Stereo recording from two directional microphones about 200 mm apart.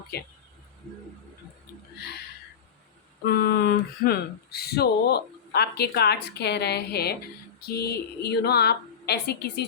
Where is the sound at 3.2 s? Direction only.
50° left (ahead or behind).